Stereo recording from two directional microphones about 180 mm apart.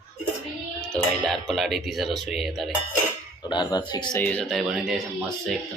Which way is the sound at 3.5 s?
25° left (ahead or behind).